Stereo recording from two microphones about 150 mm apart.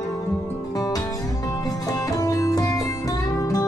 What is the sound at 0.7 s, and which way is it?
Music, 25° left (ahead or behind).